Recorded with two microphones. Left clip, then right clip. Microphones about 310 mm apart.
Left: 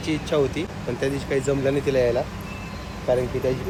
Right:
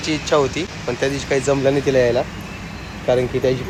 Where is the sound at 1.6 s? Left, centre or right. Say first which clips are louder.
Right 5 dB; right.